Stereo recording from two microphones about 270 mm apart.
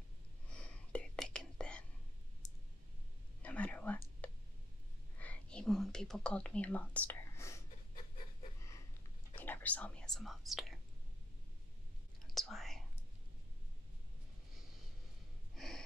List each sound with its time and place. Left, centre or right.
0.6 s whispering: centre
3.4 s whispering: centre
7.9 s a sound: left
9.3 s whispering: centre
12.4 s whispering: centre
15.5 s snort: centre